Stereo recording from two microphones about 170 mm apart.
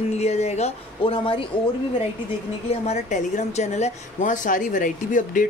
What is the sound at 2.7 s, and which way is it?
A woman's voice, 40° left (ahead or behind).